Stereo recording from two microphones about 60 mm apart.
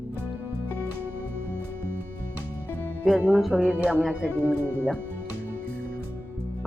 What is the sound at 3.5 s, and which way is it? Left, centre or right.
Speech, right.